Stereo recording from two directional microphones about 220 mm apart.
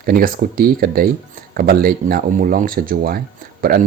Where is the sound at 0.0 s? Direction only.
40° right (ahead or behind).